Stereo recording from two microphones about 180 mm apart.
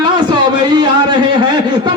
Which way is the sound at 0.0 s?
25° right (ahead or behind).